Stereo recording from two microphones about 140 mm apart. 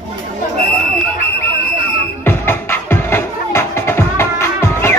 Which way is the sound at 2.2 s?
15° left (ahead or behind).